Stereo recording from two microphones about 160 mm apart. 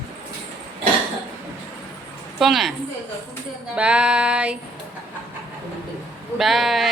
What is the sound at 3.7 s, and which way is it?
Speech, 5° right (ahead or behind).